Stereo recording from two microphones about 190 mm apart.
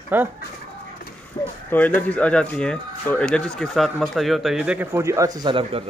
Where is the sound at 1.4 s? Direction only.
20° left (ahead or behind).